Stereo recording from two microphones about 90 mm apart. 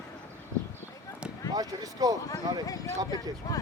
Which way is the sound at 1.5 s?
45° right (ahead or behind).